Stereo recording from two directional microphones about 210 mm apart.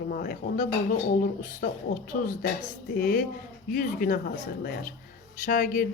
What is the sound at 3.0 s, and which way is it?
Speech, 40° left (ahead or behind).